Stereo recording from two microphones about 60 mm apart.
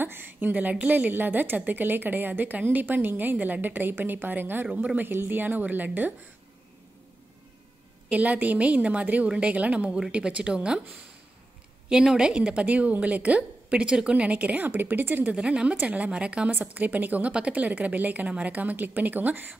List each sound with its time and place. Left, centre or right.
0.0 s a woman's voice: right
4.6 s a woman's voice: right
8.1 s a woman's voice: right
11.9 s a woman's voice: centre; by 15.3 s right
15.3 s speech: centre
15.7 s a woman's voice: right
16.4 s a woman's voice: right